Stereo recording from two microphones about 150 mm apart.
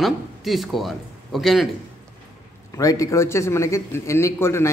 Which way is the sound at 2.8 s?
20° left (ahead or behind).